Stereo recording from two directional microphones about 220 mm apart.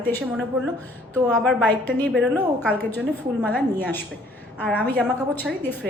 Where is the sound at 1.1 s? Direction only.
5° left (ahead or behind).